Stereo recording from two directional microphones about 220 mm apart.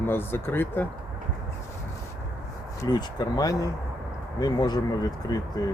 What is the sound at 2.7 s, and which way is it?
Speech, 15° left (ahead or behind).